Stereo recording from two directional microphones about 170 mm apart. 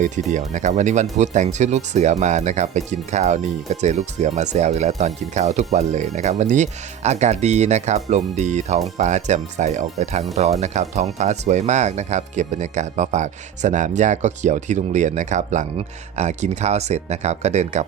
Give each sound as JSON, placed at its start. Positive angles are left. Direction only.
{"t": 0.0, "sound": "speech", "side_deg": -45}